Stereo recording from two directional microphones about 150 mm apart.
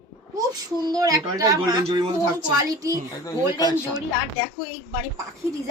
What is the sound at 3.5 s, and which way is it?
Speech, 30° left (ahead or behind).